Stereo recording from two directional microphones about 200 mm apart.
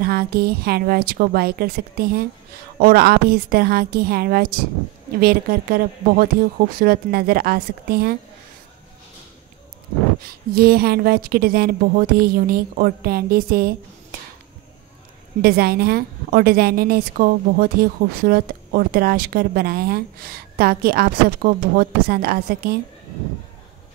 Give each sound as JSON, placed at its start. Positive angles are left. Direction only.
{"t": 0.0, "sound": "a woman's voice", "side_deg": -50}
{"t": 10.2, "sound": "a woman's voice", "side_deg": -50}
{"t": 15.4, "sound": "a woman's voice", "side_deg": -50}